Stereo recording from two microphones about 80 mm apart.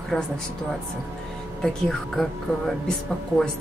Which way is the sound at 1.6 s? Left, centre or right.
Centre.